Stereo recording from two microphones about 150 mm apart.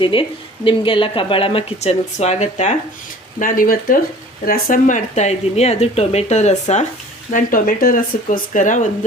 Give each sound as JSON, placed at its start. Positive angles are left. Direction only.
{"t": 0.0, "sound": "speech", "side_deg": 35}
{"t": 3.4, "sound": "speech", "side_deg": 65}
{"t": 7.3, "sound": "speech", "side_deg": 70}